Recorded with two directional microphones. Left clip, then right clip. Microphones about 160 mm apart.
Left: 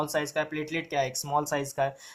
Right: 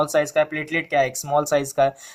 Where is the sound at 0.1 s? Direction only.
45° right (ahead or behind).